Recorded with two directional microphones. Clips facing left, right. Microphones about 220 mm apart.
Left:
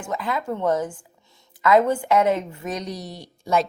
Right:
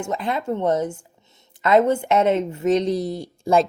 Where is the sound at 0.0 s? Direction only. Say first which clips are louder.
Right 2 dB; 25° right (ahead or behind).